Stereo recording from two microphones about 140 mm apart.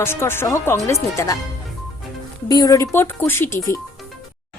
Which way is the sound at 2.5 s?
25° left (ahead or behind).